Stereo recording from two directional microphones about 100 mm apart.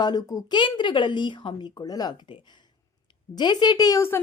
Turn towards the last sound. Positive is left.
turn(degrees=40)  # may be behind; listen again after turning